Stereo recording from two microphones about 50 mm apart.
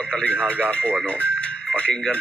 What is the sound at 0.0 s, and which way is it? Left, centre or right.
Speech, centre.